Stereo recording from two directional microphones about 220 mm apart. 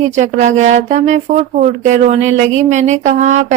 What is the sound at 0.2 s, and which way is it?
Speech, 35° right (ahead or behind).